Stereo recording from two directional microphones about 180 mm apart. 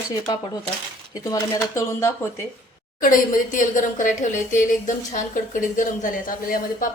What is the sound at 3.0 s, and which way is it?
A woman's voice, 50° left (ahead or behind).